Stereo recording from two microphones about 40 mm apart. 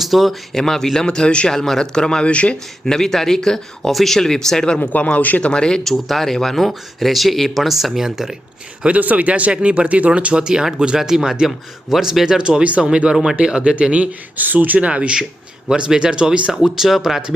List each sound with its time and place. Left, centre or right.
0.0 s speech: centre
0.5 s speech: centre
1.5 s speech: centre
2.3 s speech: left
2.8 s speech: centre
4.8 s speech: left
5.4 s speech: left
5.9 s speech: centre
8.9 s speech: right; by 12.5 s centre
12.5 s speech: right
14.3 s speech: right
14.8 s speech: right
16.5 s speech: centre